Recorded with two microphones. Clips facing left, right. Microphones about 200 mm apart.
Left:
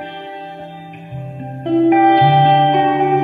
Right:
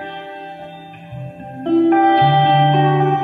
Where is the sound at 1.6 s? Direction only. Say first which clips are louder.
Left 1 dB; 15° left (ahead or behind).